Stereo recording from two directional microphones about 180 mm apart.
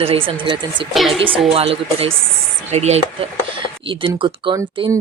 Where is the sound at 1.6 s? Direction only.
30° right (ahead or behind).